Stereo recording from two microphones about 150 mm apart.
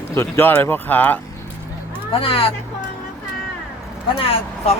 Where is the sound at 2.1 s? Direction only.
40° left (ahead or behind).